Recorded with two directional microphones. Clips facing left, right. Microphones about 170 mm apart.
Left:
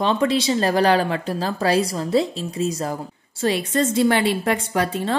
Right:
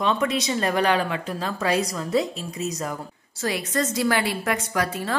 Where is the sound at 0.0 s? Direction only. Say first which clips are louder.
Left 4 dB; 30° left (ahead or behind).